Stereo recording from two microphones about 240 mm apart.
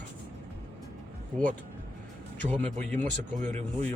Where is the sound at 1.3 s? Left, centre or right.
Right.